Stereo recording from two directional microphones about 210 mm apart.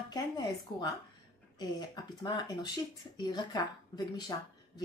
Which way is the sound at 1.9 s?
20° left (ahead or behind).